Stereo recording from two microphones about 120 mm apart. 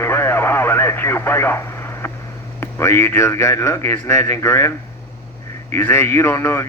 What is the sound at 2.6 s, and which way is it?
A man's voice, 20° left (ahead or behind).